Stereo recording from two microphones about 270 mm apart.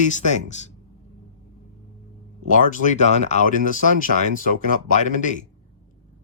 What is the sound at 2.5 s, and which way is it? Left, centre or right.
Speech, left.